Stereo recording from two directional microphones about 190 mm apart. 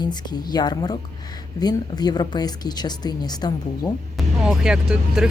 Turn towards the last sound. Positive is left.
turn(degrees=-5)  # may be behind; listen again after turning